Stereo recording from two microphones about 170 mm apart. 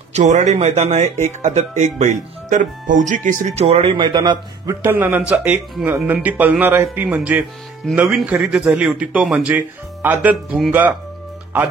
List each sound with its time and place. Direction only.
0.1 s speech: 45° right (ahead or behind); by 11.0 s 10° right (ahead or behind)